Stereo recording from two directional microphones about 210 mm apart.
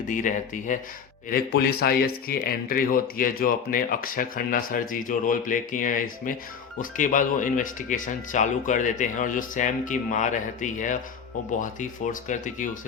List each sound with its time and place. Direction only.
0.1 s speech: 40° left (ahead or behind)